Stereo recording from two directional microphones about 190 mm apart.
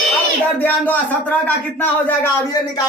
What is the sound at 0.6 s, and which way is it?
Speech, 10° left (ahead or behind).